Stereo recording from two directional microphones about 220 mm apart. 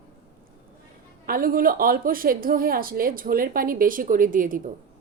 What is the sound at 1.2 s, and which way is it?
A woman's voice, 40° right (ahead or behind).